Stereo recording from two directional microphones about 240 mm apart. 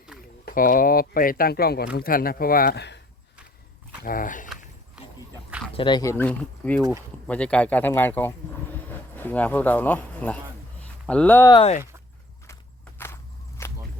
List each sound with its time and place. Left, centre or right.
0.1 s a sound: centre
0.4 s speech: left
4.0 s speech: left
5.0 s dog: centre
5.7 s speech: centre
11.5 s speech: left
13.6 s whip: centre